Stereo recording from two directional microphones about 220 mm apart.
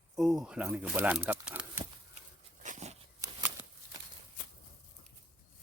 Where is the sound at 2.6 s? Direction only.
35° right (ahead or behind).